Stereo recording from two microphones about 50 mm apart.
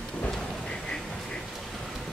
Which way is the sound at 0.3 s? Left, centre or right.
Centre.